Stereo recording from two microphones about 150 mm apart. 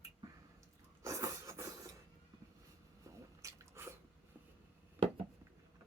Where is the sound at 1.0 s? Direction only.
20° right (ahead or behind).